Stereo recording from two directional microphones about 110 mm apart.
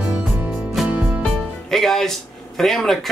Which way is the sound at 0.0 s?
10° right (ahead or behind).